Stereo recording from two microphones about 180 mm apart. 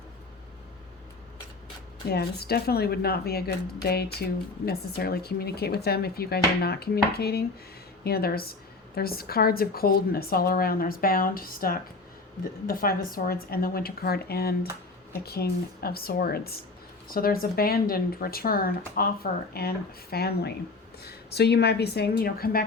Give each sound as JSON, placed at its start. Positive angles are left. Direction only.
{"t": 2.0, "sound": "speech", "side_deg": 60}